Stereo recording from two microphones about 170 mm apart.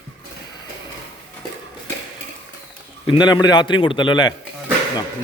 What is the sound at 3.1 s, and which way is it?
A man's voice, 25° left (ahead or behind).